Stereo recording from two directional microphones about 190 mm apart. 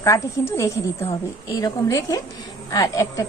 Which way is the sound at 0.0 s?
15° left (ahead or behind).